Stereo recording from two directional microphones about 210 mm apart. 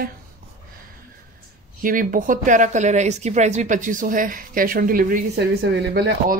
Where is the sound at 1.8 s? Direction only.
40° right (ahead or behind).